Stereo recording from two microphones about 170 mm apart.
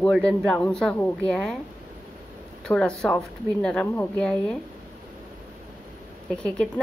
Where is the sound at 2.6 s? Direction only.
5° left (ahead or behind).